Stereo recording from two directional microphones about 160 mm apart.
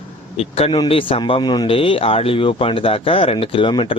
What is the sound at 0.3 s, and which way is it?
Speech, 40° left (ahead or behind).